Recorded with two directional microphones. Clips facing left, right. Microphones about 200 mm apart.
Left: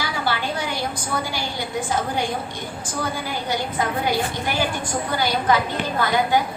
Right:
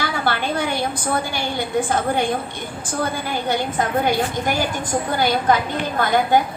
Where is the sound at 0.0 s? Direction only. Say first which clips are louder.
Right 3 dB; 55° right (ahead or behind).